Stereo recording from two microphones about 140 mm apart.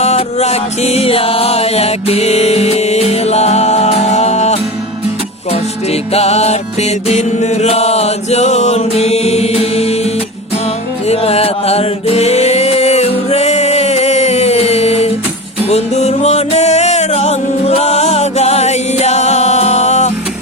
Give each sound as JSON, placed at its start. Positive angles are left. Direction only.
{"t": 0.0, "sound": "music", "side_deg": 50}